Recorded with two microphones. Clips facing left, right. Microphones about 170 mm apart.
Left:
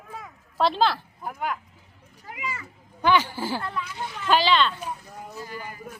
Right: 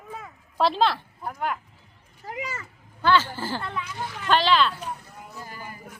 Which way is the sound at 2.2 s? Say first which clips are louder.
Right 2 dB; 40° right (ahead or behind).